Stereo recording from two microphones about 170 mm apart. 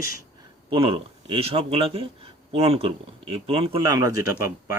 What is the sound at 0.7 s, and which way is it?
Speech, 35° right (ahead or behind).